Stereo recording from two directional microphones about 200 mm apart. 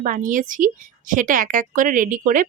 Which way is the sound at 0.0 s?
40° right (ahead or behind).